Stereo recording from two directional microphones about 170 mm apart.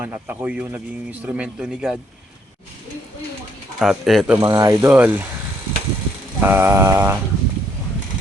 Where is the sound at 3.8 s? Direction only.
Centre (ahead or behind).